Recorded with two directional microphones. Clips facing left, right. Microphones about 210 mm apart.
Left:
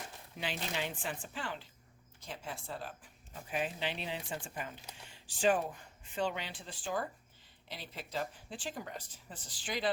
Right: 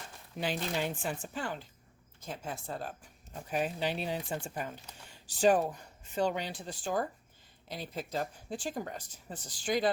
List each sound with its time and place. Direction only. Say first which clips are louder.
0.3 s speech: right 5 dB; 45° right (ahead or behind)